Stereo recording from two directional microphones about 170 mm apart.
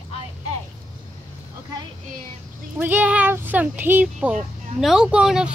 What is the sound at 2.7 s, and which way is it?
Speech, 10° right (ahead or behind).